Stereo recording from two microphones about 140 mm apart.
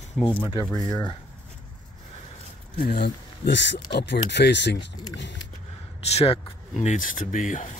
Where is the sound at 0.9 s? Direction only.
25° left (ahead or behind).